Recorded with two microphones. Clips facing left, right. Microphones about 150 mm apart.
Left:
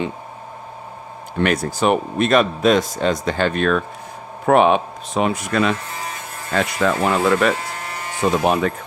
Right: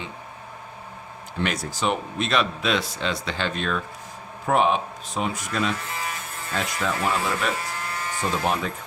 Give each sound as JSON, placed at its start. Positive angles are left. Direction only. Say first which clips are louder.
{"t": 1.4, "sound": "a man's voice", "louder": "left 8 dB", "side_deg": 55}
{"t": 8.2, "sound": "speech", "louder": "left 8 dB", "side_deg": 65}